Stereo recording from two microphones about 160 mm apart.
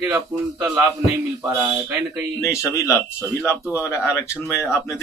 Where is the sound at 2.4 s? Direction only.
20° left (ahead or behind).